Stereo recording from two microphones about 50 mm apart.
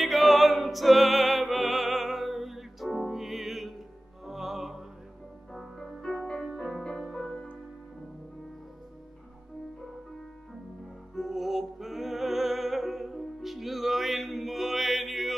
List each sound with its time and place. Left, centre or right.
0.0 s music: centre
6.0 s music: centre
11.1 s music: centre